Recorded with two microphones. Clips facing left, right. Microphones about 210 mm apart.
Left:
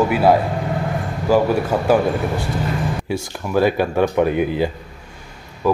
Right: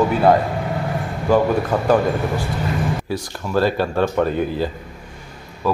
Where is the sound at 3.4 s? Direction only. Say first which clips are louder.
Left 2 dB; 15° left (ahead or behind).